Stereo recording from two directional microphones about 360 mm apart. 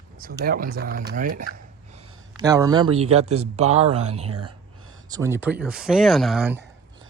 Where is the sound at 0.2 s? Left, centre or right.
Right.